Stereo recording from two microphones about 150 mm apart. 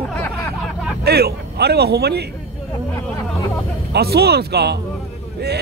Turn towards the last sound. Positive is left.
turn(degrees=-90)